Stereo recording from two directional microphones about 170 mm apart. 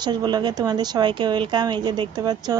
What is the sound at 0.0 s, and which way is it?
A woman's voice, 25° right (ahead or behind).